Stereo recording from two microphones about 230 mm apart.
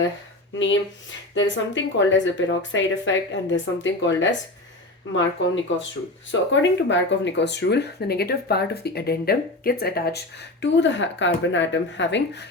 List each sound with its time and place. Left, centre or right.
0.5 s speech: left
5.4 s speech: left